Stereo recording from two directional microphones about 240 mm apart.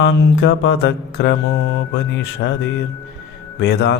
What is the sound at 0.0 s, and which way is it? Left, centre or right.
Mantra, left.